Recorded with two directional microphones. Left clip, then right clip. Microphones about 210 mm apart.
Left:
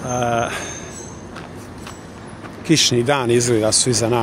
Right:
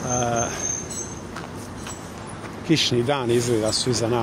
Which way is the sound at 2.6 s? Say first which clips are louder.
Left 5 dB; 25° left (ahead or behind).